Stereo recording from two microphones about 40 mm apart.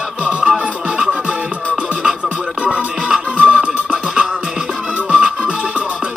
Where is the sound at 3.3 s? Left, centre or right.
Right.